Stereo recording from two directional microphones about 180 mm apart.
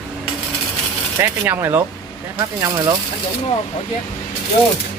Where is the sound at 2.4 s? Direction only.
20° right (ahead or behind).